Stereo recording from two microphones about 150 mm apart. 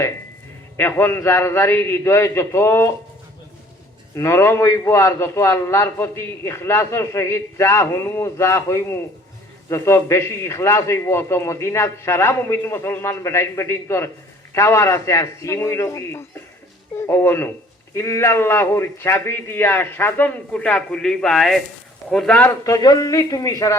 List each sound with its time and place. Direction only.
0.8 s a man's voice: 15° left (ahead or behind)
4.1 s a man's voice: 20° left (ahead or behind)
22.4 s a man's voice: 20° left (ahead or behind)